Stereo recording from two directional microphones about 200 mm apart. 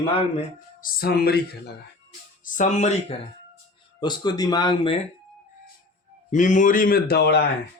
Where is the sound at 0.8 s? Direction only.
50° left (ahead or behind).